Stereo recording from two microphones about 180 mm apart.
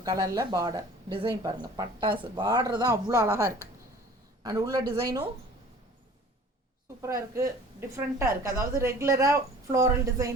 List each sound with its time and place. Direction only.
0.0 s speech: 20° right (ahead or behind)
7.8 s a woman's voice: 15° right (ahead or behind)